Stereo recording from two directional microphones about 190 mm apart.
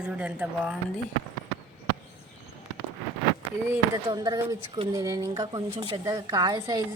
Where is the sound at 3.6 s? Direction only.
20° right (ahead or behind).